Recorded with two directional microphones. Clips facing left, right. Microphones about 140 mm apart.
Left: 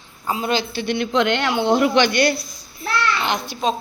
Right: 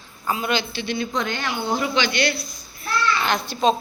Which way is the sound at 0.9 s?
85° left.